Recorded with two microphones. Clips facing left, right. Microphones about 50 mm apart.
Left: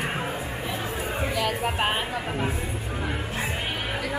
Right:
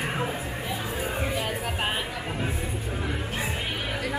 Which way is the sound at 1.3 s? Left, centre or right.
Left.